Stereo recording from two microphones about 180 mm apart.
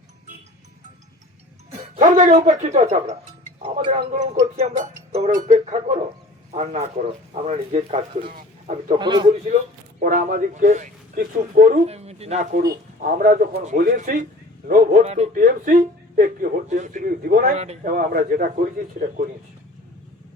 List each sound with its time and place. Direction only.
2.0 s a man's voice: 45° right (ahead or behind)
9.0 s a man's voice: 25° right (ahead or behind)
10.0 s a man's voice: 50° right (ahead or behind)
17.5 s a man's voice: 35° right (ahead or behind)
17.9 s a man's voice: 50° right (ahead or behind)